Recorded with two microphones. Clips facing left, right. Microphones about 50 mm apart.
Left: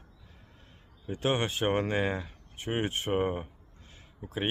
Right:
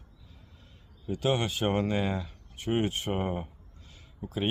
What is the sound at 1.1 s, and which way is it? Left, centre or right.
Speech, left.